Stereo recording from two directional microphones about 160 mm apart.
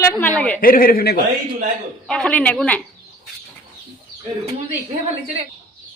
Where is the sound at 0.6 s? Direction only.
60° left (ahead or behind).